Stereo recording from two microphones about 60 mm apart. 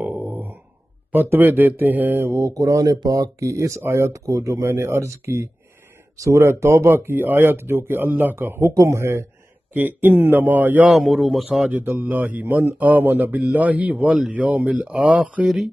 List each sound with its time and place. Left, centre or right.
0.3 s a sound: right
1.1 s speech: right
2.3 s speech: right
3.8 s speech: right
9.8 s speech: right
10.9 s a man's voice: centre
12.0 s speech: right